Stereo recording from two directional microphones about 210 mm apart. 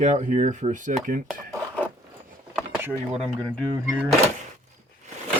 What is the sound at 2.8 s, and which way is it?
Speech, 10° right (ahead or behind).